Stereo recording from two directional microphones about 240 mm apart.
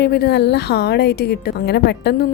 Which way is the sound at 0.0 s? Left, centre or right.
Left.